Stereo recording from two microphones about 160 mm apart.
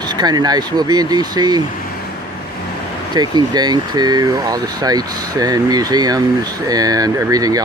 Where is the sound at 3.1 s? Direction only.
25° right (ahead or behind).